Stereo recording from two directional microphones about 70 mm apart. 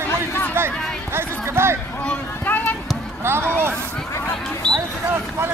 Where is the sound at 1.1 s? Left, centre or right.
Right.